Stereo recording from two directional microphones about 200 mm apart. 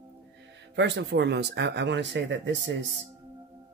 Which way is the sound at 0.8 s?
60° right (ahead or behind).